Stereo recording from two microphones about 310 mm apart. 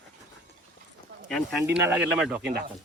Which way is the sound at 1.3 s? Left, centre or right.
Centre.